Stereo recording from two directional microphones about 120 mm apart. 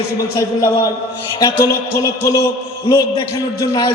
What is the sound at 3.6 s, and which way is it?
Speech, 30° left (ahead or behind).